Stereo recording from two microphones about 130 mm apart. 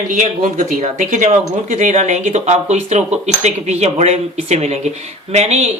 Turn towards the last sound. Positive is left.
turn(degrees=-55)  # may be behind; listen again after turning